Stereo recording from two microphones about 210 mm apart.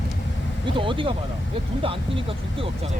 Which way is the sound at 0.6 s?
25° right (ahead or behind).